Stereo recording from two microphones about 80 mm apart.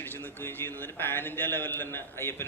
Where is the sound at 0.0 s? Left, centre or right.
Left.